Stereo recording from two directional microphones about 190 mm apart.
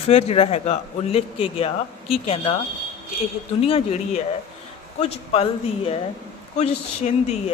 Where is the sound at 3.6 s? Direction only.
35° left (ahead or behind).